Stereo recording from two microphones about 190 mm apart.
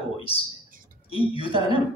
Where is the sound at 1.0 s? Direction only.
30° left (ahead or behind).